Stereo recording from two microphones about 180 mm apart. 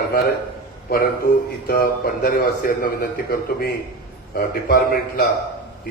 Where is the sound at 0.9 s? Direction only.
55° left (ahead or behind).